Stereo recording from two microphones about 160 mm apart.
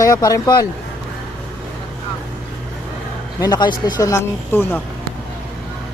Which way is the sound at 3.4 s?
25° left (ahead or behind).